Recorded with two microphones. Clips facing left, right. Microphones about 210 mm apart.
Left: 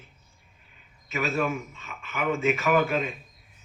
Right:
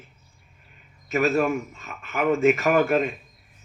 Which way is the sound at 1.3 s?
45° right (ahead or behind).